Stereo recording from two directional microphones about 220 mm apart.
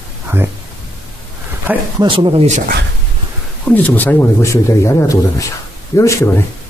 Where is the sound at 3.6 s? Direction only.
5° left (ahead or behind).